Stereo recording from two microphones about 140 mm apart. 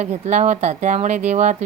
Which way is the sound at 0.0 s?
60° right (ahead or behind).